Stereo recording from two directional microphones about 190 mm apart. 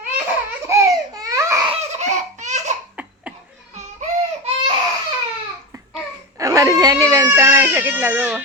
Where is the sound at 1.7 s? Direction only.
35° right (ahead or behind).